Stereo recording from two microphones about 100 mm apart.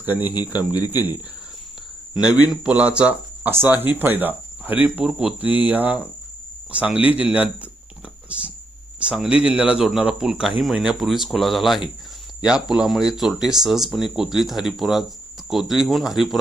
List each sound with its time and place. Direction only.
0.0 s speech: 15° right (ahead or behind)
2.5 s speech: 10° right (ahead or behind)
9.0 s speech: 5° right (ahead or behind)